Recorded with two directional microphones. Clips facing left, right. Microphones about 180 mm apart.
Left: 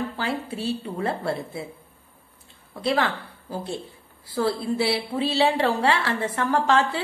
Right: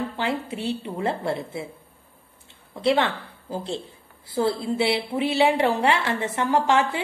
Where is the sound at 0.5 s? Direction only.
20° right (ahead or behind).